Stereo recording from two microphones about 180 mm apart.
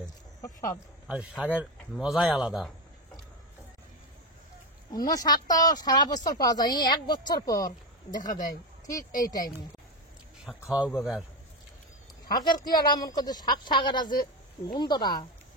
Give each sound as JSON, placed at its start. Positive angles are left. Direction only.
{"t": 0.4, "sound": "a sound", "side_deg": 20}
{"t": 1.0, "sound": "speech", "side_deg": -5}
{"t": 4.9, "sound": "speech", "side_deg": 20}
{"t": 10.4, "sound": "speech", "side_deg": 0}
{"t": 12.3, "sound": "speech", "side_deg": 20}